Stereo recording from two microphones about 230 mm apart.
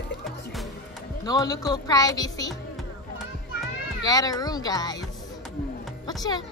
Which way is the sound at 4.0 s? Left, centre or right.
Centre.